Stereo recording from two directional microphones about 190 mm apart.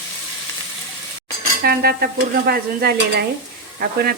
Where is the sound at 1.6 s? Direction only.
55° right (ahead or behind).